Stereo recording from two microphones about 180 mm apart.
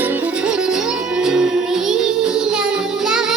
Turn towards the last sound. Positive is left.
turn(degrees=-5)  # may be behind; listen again after turning